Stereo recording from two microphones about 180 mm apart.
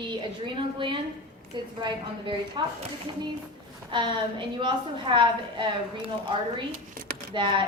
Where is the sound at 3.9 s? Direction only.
25° right (ahead or behind).